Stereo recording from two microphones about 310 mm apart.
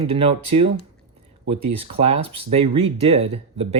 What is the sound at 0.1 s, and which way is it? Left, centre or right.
Speech, centre.